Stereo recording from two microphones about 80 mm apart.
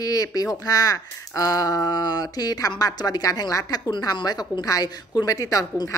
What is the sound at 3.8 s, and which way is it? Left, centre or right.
A woman's voice, left.